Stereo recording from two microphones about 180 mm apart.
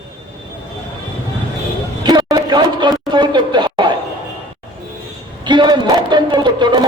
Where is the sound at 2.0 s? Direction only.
20° right (ahead or behind).